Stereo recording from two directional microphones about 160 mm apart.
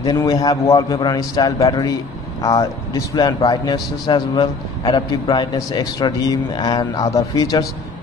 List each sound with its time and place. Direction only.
0.0 s a man's voice: 25° left (ahead or behind)